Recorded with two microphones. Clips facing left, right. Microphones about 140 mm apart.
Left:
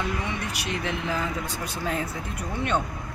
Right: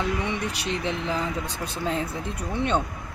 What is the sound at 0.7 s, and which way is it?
Speech, 25° right (ahead or behind).